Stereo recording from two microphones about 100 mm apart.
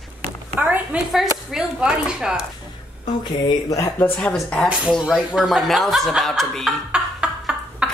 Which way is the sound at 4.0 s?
15° left (ahead or behind).